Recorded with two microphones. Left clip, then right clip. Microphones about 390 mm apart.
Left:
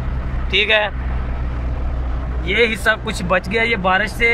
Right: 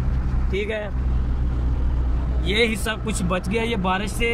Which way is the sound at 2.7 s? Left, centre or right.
Centre.